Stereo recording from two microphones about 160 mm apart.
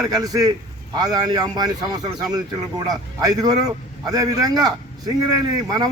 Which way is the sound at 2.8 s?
25° right (ahead or behind).